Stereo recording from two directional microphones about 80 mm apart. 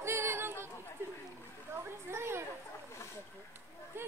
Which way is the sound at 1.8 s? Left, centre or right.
Right.